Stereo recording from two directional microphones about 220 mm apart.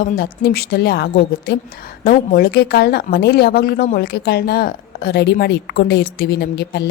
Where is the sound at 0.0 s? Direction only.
45° left (ahead or behind).